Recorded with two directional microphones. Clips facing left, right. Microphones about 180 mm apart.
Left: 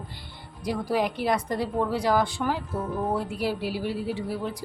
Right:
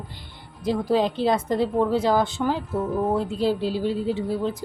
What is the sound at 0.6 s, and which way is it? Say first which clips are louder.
A woman's voice: right 4 dB; 25° right (ahead or behind).